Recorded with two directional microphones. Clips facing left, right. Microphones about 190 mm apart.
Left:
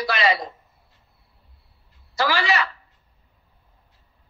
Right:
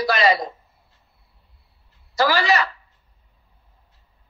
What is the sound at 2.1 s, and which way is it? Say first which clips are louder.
Speech: right 3 dB; 40° right (ahead or behind).